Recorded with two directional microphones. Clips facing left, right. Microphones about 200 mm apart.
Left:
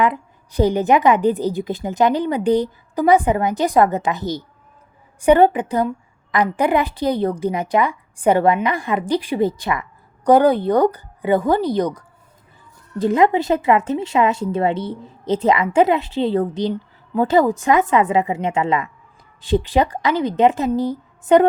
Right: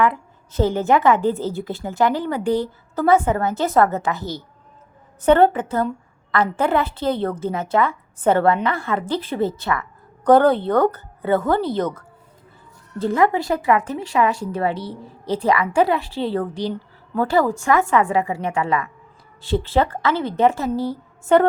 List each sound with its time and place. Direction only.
0.0 s a woman's voice: 15° left (ahead or behind)